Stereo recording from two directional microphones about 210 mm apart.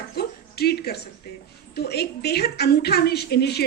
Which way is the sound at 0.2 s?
50° left (ahead or behind).